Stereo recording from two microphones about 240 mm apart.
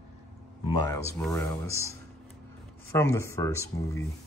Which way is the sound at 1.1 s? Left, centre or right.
Centre.